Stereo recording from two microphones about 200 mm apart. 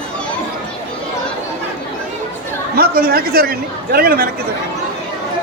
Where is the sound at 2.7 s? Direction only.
50° right (ahead or behind).